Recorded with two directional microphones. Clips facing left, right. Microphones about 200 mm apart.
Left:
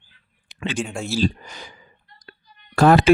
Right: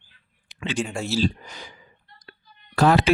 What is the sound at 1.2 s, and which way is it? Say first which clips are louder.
Speech: left 4 dB; 45° left (ahead or behind).